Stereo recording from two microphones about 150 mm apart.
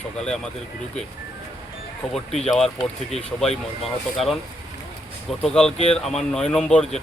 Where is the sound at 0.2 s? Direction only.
5° left (ahead or behind).